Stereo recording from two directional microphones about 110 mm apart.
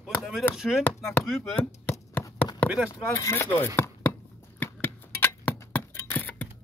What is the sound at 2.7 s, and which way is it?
Speech, 10° right (ahead or behind).